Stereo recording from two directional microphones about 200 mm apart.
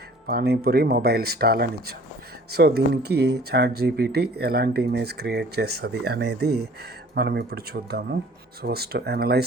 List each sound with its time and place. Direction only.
0.3 s speech: 50° right (ahead or behind)